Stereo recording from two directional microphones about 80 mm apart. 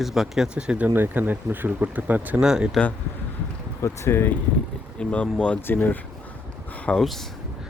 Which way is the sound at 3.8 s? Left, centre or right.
Left.